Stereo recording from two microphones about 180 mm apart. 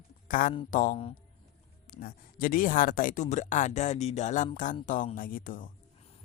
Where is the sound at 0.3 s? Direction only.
50° left (ahead or behind).